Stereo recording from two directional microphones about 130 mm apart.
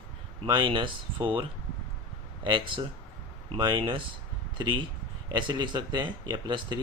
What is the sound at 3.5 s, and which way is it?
Speech, 40° right (ahead or behind).